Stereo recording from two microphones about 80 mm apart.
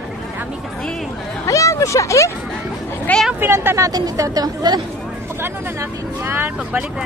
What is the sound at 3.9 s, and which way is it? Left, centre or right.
Speech, right.